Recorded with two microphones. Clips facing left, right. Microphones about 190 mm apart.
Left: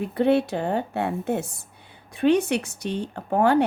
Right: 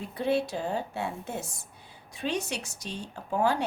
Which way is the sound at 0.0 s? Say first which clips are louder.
Left 7 dB; 60° left (ahead or behind).